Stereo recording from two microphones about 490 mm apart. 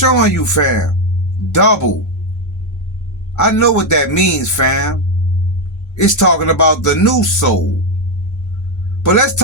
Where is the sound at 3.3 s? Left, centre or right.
Left.